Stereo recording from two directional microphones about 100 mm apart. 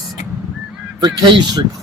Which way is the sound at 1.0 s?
45° right (ahead or behind).